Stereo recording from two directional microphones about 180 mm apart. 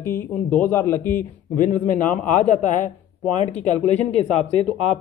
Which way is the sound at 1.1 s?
45° left (ahead or behind).